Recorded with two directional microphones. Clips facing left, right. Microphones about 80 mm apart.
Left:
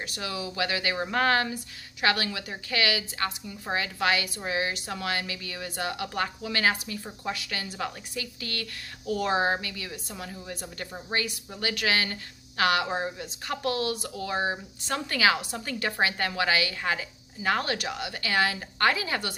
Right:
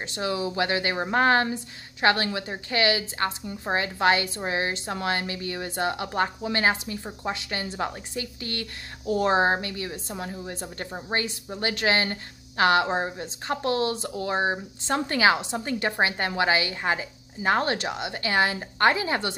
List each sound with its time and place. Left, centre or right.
0.0 s speech: right